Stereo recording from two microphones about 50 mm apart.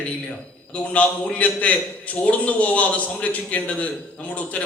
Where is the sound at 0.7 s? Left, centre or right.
Left.